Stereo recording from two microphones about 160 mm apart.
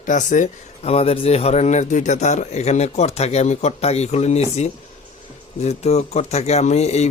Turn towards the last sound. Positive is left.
turn(degrees=45)  # may be behind; listen again after turning